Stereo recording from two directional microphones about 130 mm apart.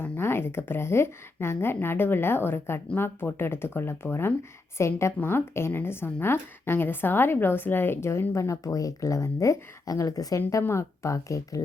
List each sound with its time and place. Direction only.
0.0 s a woman's voice: 20° left (ahead or behind)